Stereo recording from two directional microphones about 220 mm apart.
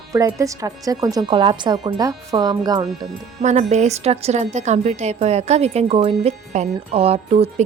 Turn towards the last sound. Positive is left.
turn(degrees=-30)  # may be behind; listen again after turning